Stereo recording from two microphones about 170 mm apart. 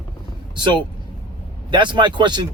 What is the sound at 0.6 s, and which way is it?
Speech, 25° right (ahead or behind).